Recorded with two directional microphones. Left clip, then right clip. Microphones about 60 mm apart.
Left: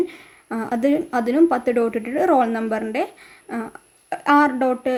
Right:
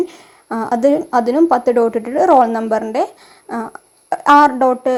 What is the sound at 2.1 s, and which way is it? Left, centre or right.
A woman's voice, right.